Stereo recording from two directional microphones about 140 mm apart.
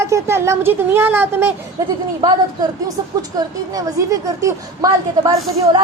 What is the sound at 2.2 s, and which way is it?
A woman's voice, 30° right (ahead or behind).